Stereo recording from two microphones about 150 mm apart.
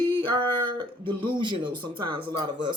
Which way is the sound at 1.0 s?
35° right (ahead or behind).